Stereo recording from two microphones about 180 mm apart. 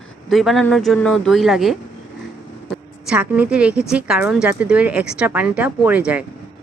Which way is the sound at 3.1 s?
5° right (ahead or behind).